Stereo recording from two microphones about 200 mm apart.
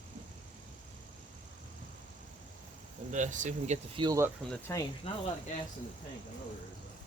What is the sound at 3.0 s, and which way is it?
Speech, 40° right (ahead or behind).